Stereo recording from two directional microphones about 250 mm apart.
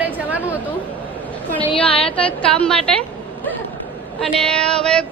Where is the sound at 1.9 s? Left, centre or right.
Left.